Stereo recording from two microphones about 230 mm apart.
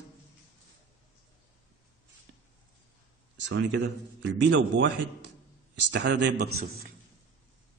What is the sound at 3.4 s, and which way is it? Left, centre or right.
A man's voice, right.